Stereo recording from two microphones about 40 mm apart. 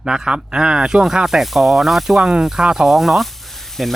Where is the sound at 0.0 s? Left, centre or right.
Centre.